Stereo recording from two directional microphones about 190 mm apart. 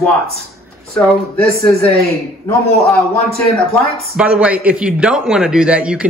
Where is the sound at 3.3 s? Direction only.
Centre (ahead or behind).